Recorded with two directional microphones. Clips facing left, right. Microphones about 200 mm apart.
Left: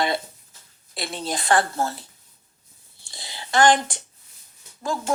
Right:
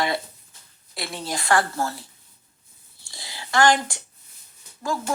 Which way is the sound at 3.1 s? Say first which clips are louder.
Left 1 dB; 25° left (ahead or behind).